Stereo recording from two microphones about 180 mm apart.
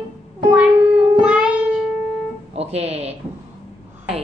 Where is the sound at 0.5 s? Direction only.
5° right (ahead or behind).